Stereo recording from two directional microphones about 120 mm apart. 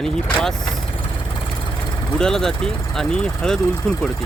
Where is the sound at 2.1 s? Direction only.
5° left (ahead or behind).